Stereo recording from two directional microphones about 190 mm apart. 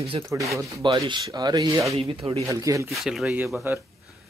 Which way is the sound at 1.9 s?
30° right (ahead or behind).